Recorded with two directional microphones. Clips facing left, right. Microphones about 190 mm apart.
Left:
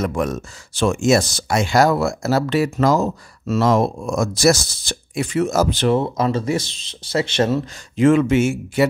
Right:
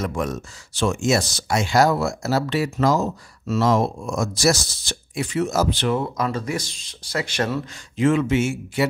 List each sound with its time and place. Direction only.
0.0 s speech: 55° left (ahead or behind)
5.9 s speech: 25° left (ahead or behind)
8.0 s speech: 50° left (ahead or behind)